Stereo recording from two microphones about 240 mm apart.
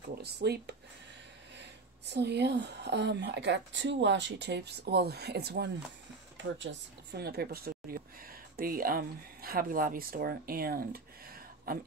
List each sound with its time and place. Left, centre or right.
0.2 s speech: right